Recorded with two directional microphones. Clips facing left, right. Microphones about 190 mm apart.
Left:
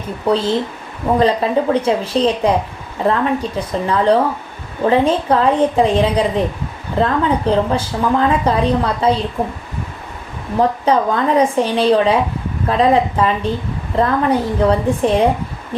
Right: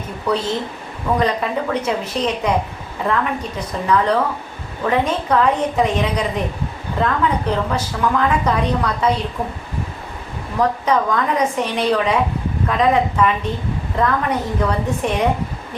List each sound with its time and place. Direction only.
0.3 s a woman's voice: 30° left (ahead or behind)
10.6 s a woman's voice: 30° left (ahead or behind)